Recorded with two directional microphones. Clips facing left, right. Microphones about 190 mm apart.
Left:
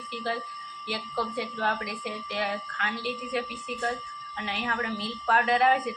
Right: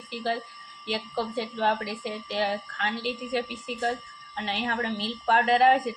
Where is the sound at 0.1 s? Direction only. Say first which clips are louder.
Right 3 dB; 30° right (ahead or behind).